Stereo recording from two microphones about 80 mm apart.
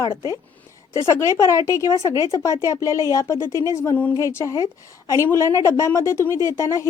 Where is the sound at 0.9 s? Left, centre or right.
Left.